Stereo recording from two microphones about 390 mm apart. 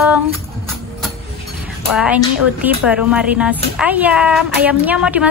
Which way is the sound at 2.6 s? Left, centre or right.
Centre.